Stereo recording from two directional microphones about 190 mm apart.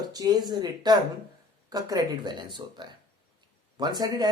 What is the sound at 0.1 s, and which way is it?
Speech, 20° right (ahead or behind).